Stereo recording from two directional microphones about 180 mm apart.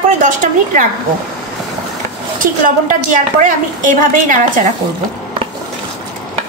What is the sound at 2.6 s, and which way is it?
A woman's voice, 45° right (ahead or behind).